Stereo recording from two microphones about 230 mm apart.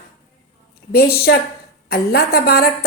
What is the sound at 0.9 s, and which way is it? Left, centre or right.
A woman's voice, left.